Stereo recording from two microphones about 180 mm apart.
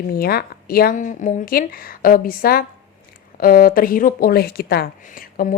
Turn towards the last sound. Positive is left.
turn(degrees=50)  # may be behind; listen again after turning